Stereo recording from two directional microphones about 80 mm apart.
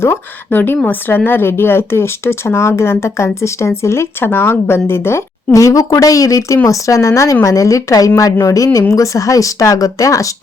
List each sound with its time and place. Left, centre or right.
0.0 s speech: left
5.5 s speech: left